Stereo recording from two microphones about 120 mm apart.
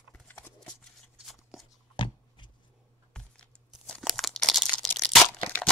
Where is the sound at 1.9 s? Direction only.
40° left (ahead or behind).